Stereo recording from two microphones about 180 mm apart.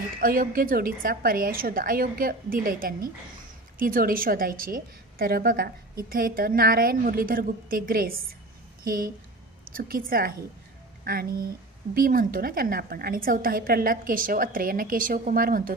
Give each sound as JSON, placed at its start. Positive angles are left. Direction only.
{"t": 0.2, "sound": "a woman's voice", "side_deg": -50}